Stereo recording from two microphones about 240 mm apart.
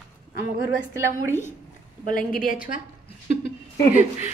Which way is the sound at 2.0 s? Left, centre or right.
Left.